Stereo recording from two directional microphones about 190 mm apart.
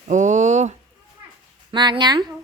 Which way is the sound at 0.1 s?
40° right (ahead or behind).